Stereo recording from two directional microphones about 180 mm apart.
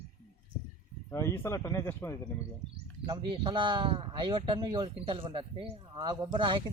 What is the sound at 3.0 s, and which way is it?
Speech, 25° right (ahead or behind).